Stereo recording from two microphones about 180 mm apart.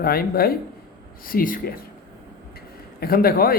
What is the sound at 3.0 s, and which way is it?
Speech, 55° left (ahead or behind).